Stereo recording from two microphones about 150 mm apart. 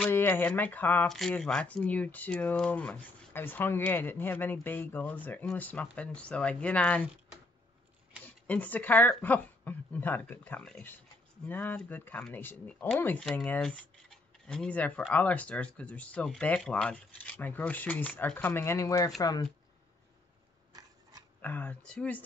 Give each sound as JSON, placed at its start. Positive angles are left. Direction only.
{"t": 0.0, "sound": "speech", "side_deg": 15}
{"t": 8.2, "sound": "speech", "side_deg": 10}
{"t": 21.4, "sound": "speech", "side_deg": 10}